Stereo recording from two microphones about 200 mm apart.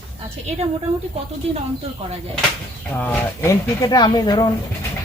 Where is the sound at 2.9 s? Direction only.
10° left (ahead or behind).